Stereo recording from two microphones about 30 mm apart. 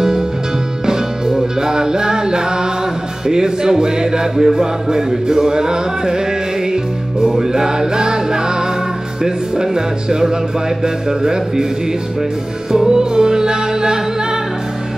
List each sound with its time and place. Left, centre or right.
0.8 s music: centre
12.7 s music: right